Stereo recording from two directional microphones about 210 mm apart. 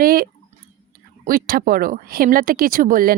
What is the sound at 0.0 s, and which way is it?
Speech, 45° right (ahead or behind).